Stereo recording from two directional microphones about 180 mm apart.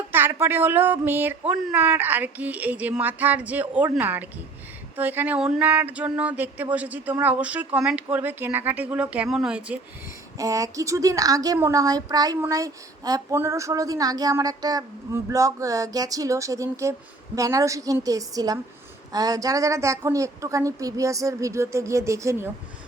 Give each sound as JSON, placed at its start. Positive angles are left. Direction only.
{"t": 0.1, "sound": "speech", "side_deg": -15}
{"t": 10.3, "sound": "a woman's voice", "side_deg": -20}